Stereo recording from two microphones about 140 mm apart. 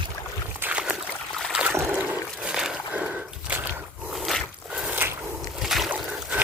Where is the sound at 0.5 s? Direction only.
10° right (ahead or behind).